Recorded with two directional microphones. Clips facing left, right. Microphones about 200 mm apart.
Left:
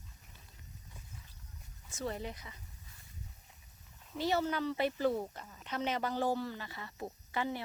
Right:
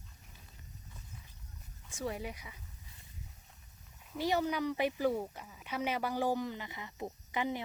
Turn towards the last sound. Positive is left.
turn(degrees=-15)  # may be behind; listen again after turning